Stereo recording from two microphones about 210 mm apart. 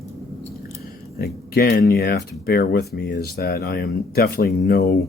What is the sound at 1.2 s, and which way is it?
Speech, 50° left (ahead or behind).